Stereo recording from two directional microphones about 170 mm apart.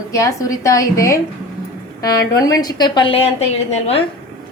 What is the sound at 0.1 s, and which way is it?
A woman's voice, 20° left (ahead or behind).